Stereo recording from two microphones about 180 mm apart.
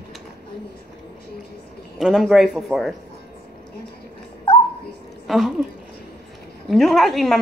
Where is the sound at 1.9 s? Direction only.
5° right (ahead or behind).